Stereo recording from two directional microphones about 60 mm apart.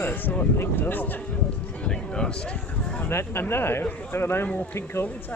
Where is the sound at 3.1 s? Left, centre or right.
Left.